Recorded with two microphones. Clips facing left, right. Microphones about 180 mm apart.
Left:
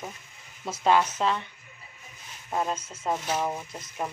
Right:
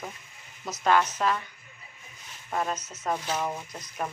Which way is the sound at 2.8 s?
30° left (ahead or behind).